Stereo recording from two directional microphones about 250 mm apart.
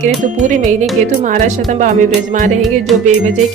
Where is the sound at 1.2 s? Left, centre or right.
Right.